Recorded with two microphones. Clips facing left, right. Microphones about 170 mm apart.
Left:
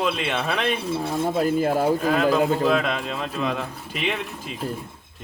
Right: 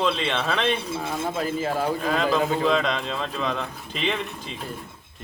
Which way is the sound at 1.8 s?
5° left (ahead or behind).